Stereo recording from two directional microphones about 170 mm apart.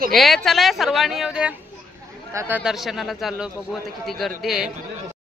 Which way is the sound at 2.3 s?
15° right (ahead or behind).